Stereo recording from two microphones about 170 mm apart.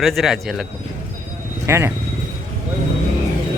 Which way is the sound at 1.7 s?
15° right (ahead or behind).